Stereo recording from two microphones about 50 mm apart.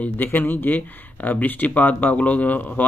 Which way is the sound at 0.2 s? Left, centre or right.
Left.